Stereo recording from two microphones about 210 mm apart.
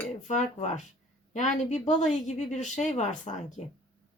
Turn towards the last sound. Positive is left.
turn(degrees=35)  # may be behind; listen again after turning